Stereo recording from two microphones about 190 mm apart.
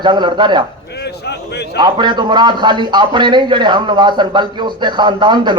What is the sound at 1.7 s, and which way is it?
A man's voice, 25° right (ahead or behind).